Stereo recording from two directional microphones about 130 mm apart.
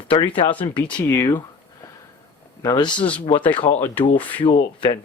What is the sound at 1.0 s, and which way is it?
Speech, 20° left (ahead or behind).